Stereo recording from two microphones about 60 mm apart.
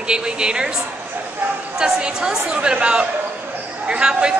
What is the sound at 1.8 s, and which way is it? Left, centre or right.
A woman's voice, centre.